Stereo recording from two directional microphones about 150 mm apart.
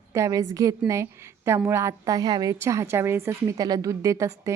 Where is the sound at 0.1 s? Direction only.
20° right (ahead or behind).